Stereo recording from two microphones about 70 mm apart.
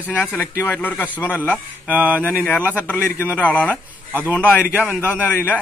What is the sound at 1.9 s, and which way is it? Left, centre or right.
Speech, right.